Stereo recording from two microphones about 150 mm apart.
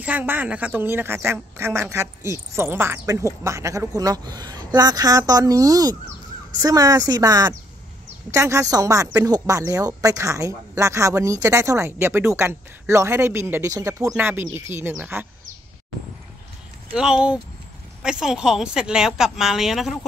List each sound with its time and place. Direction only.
0.0 s a woman's voice: 10° right (ahead or behind)
16.9 s a woman's voice: 5° right (ahead or behind)